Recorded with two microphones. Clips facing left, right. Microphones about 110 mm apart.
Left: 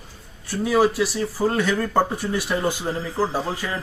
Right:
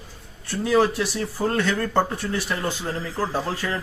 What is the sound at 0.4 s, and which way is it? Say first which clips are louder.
Speech: left 1 dB; 10° left (ahead or behind).